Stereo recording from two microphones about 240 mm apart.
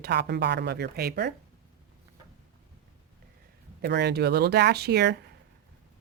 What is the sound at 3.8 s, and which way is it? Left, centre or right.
Speech, right.